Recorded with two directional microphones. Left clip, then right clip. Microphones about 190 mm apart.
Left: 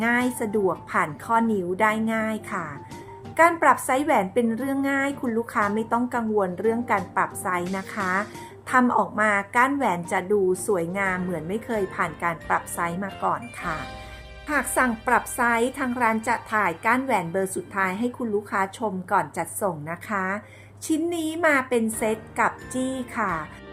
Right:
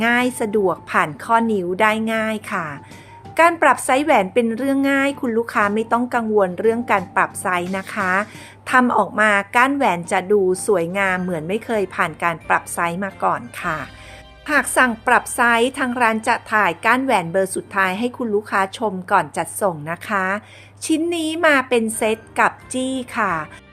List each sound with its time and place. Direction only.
0.0 s a woman's voice: 30° right (ahead or behind)